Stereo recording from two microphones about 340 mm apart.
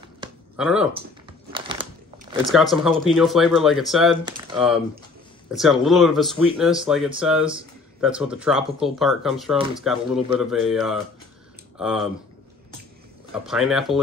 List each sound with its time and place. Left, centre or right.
0.6 s speech: centre
1.5 s a sound: centre
2.4 s speech: centre
13.3 s speech: centre